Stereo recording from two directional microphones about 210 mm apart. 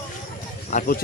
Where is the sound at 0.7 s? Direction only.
35° left (ahead or behind).